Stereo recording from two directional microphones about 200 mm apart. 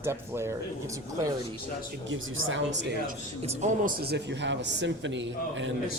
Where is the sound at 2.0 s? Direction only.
70° right (ahead or behind).